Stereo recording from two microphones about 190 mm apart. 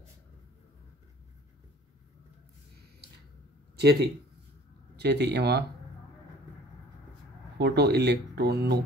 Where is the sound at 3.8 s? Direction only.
60° right (ahead or behind).